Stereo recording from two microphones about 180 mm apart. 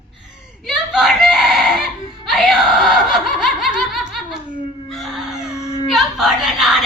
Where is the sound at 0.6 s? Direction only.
Centre (ahead or behind).